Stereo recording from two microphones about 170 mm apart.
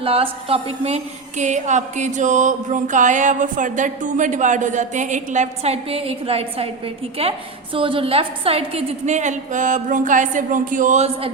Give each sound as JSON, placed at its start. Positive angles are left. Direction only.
{"t": 0.0, "sound": "a woman's voice", "side_deg": -35}